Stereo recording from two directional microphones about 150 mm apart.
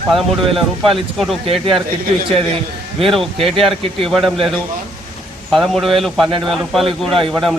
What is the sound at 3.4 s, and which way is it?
Speech, 40° right (ahead or behind).